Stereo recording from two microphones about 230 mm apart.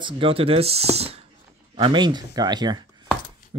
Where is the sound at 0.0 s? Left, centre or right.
Right.